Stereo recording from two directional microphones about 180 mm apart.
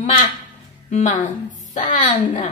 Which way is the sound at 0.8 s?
40° left (ahead or behind).